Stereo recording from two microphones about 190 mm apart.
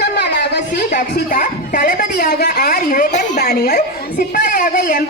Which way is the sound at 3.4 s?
60° left (ahead or behind).